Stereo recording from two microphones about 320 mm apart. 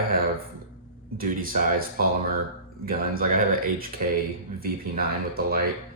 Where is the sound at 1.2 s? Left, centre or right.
Right.